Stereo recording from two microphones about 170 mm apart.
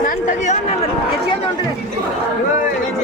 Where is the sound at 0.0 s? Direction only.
50° left (ahead or behind).